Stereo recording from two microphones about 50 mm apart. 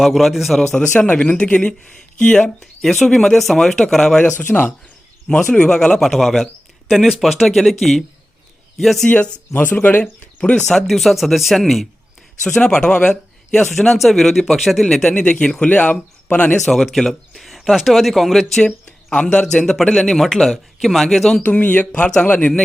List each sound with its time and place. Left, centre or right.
0.0 s speech: centre
0.8 s speech: left
1.8 s speech: centre
2.6 s speech: centre
4.4 s speech: left
5.4 s speech: centre
9.0 s speech: left
9.5 s speech: left
10.0 s speech: left
10.7 s speech: centre
15.1 s speech: centre
15.6 s speech: left
16.6 s speech: centre
21.4 s speech: left